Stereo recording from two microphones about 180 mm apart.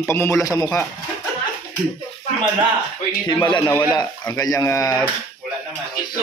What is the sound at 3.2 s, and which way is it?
Speech, 25° left (ahead or behind).